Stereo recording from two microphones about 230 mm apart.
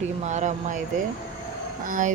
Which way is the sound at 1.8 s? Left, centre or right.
Right.